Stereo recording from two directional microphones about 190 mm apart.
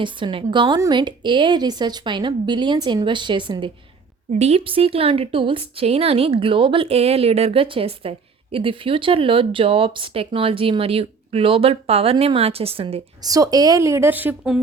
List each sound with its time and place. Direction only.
0.0 s speech: 25° right (ahead or behind)
4.3 s speech: 35° right (ahead or behind)
13.2 s a woman's voice: 20° right (ahead or behind)